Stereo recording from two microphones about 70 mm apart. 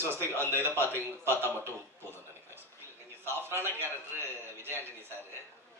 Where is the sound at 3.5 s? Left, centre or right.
Right.